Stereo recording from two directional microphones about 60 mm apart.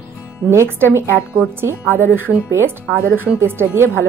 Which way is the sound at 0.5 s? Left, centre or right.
Right.